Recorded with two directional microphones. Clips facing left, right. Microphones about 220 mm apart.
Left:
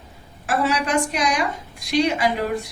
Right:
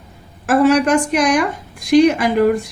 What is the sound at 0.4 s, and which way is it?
A woman's voice, 50° right (ahead or behind).